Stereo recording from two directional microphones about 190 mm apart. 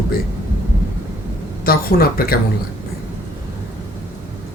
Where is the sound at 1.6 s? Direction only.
50° left (ahead or behind).